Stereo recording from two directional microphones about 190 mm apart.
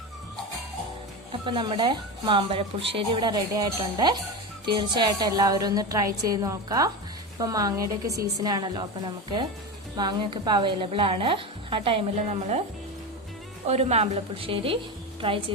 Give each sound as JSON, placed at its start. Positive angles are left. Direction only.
{"t": 1.3, "sound": "a woman's voice", "side_deg": -25}
{"t": 10.0, "sound": "speech", "side_deg": -25}
{"t": 13.7, "sound": "a woman's voice", "side_deg": -35}